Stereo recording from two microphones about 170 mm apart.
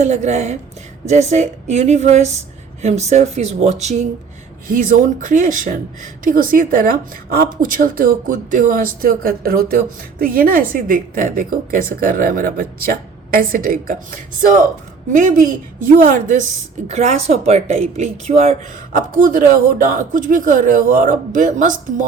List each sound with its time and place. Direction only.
0.0 s speech: 45° right (ahead or behind)
4.7 s a woman's voice: 50° right (ahead or behind)
16.9 s speech: 40° right (ahead or behind)
18.9 s speech: 55° right (ahead or behind)